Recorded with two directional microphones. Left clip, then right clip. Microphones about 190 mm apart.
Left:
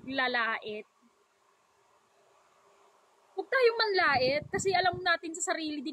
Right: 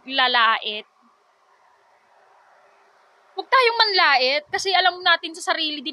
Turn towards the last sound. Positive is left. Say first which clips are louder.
# right 10 dB
turn(degrees=15)  # may be behind; listen again after turning